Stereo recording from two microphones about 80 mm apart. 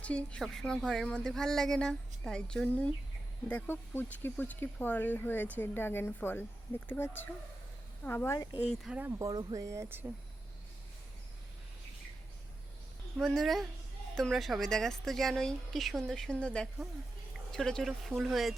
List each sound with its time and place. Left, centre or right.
0.0 s speech: centre
3.5 s a woman's voice: left
9.1 s speech: right
13.1 s speech: centre